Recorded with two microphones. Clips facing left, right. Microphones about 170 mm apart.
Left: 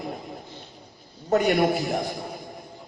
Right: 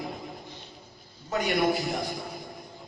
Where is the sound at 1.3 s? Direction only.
50° left (ahead or behind).